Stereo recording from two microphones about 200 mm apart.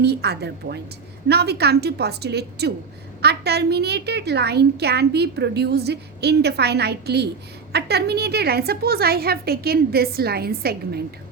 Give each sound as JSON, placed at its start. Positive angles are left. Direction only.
{"t": 0.0, "sound": "a woman's voice", "side_deg": -55}